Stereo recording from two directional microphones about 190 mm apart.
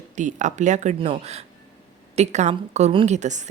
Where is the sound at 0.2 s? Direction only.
40° right (ahead or behind).